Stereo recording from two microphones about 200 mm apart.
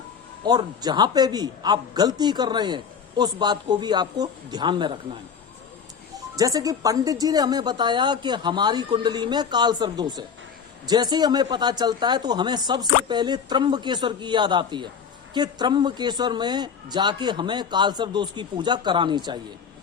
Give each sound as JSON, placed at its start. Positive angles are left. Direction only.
{"t": 0.4, "sound": "a man's voice", "side_deg": -20}
{"t": 6.3, "sound": "a man's voice", "side_deg": -15}